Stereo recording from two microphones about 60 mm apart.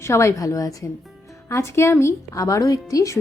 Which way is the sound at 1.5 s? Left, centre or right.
Left.